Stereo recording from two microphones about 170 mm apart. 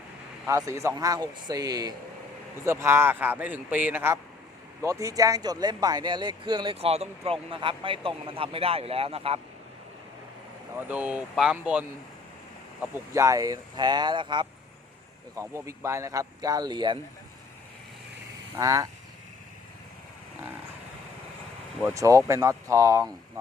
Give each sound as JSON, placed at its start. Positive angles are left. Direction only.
{"t": 0.4, "sound": "a man's voice", "side_deg": -15}
{"t": 10.8, "sound": "a man's voice", "side_deg": -10}
{"t": 18.5, "sound": "speech", "side_deg": -20}
{"t": 21.8, "sound": "a man's voice", "side_deg": -15}